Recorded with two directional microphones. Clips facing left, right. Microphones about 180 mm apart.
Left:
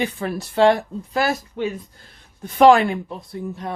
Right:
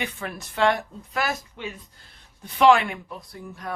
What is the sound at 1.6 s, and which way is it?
Speech, 45° left (ahead or behind).